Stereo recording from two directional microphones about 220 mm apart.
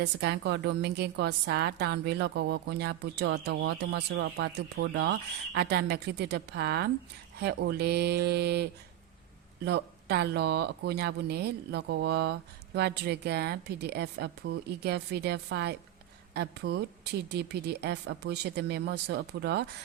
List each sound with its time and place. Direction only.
0.0 s speech: 50° right (ahead or behind)
9.6 s speech: 50° right (ahead or behind)